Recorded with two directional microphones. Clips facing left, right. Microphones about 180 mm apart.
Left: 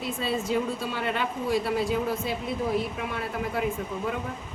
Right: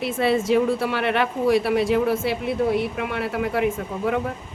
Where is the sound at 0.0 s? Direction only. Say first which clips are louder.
Right 8 dB; 80° right.